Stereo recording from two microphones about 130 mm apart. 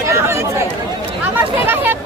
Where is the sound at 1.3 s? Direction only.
15° right (ahead or behind).